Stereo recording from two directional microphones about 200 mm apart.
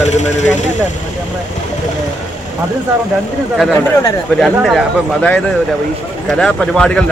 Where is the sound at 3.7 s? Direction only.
15° left (ahead or behind).